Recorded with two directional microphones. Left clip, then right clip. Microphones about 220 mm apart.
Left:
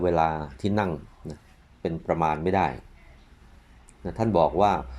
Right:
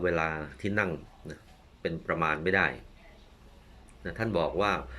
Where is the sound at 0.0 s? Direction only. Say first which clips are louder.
Left 6 dB; 20° left (ahead or behind).